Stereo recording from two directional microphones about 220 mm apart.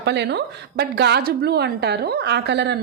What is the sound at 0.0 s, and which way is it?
A woman's voice, 50° right (ahead or behind).